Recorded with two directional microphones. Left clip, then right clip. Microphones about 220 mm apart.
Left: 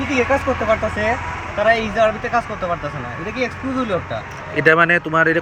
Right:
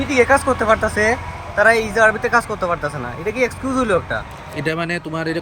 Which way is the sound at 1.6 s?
15° right (ahead or behind).